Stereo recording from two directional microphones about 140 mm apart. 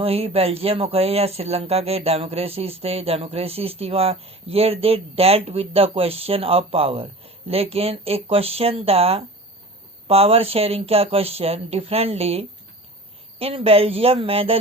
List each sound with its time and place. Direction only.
0.0 s speech: 45° right (ahead or behind)